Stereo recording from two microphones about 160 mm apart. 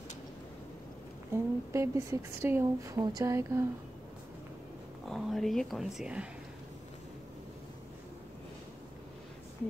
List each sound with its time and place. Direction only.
1.3 s a woman's voice: 15° right (ahead or behind)
5.0 s speech: centre (ahead or behind)